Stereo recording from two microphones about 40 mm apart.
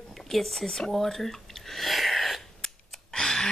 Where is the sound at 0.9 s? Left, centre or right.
Centre.